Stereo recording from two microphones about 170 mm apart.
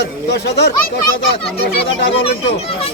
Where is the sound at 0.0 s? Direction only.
80° left.